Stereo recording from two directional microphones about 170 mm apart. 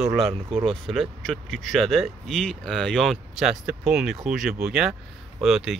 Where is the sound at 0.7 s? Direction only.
Centre (ahead or behind).